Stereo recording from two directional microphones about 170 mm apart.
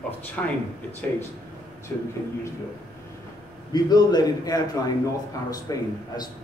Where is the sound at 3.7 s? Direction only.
25° left (ahead or behind).